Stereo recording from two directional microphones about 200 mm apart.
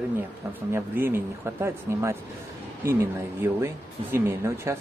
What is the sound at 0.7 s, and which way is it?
Speech, 10° right (ahead or behind).